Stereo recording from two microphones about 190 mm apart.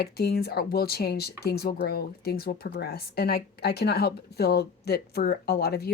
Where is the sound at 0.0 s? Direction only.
55° left (ahead or behind).